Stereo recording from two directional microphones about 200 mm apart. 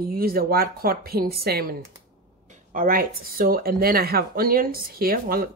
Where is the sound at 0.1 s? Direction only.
50° right (ahead or behind).